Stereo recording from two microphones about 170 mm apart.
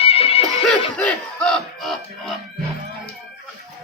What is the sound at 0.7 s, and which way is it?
Music, 5° left (ahead or behind).